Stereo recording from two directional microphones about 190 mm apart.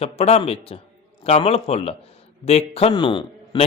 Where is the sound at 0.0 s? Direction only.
30° left (ahead or behind).